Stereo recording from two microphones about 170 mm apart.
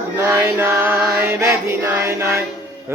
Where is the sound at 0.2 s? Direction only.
15° right (ahead or behind).